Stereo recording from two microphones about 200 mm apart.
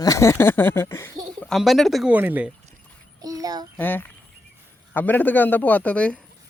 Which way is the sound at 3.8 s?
10° left (ahead or behind).